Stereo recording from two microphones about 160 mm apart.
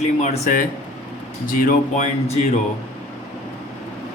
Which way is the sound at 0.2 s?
50° left (ahead or behind).